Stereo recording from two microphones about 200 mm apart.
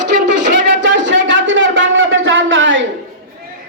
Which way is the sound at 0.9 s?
65° right (ahead or behind).